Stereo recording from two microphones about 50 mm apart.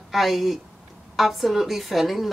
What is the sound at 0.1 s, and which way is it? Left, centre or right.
Speech, centre.